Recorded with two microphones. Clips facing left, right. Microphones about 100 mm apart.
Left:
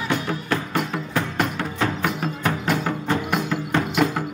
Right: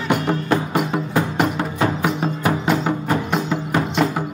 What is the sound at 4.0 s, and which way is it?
Music, 5° left (ahead or behind).